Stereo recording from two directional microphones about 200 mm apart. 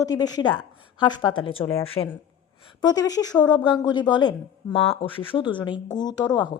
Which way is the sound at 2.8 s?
20° left (ahead or behind).